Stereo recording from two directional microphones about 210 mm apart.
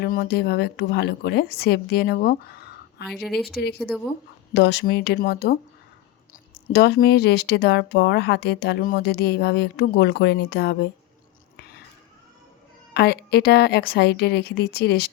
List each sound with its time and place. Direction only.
0.0 s speech: 50° left (ahead or behind)
3.1 s speech: centre (ahead or behind)
4.5 s speech: 55° left (ahead or behind)
12.9 s speech: 50° left (ahead or behind)